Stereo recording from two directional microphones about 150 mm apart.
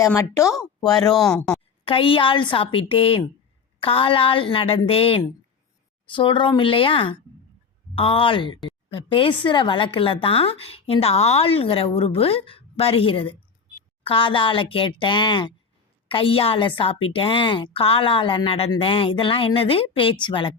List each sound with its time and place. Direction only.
0.8 s speech: 25° left (ahead or behind)
1.1 s speech: centre (ahead or behind)
1.8 s speech: 35° left (ahead or behind)